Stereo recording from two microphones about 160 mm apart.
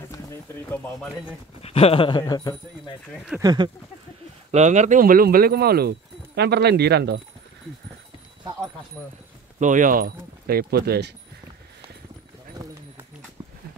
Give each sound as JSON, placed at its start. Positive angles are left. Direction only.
{"t": 0.1, "sound": "speech", "side_deg": 15}
{"t": 1.6, "sound": "speech", "side_deg": 40}
{"t": 3.3, "sound": "speech", "side_deg": -25}
{"t": 4.5, "sound": "speech", "side_deg": -45}
{"t": 9.6, "sound": "speech", "side_deg": -55}
{"t": 12.6, "sound": "a sound", "side_deg": -20}